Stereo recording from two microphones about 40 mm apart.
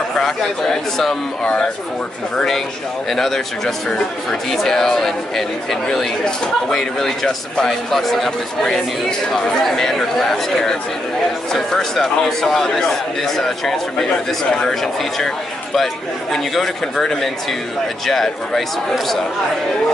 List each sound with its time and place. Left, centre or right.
0.2 s speech: centre
1.4 s speech: left
3.1 s speech: centre